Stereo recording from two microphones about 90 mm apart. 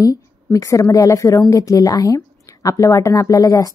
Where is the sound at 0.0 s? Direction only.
40° left (ahead or behind).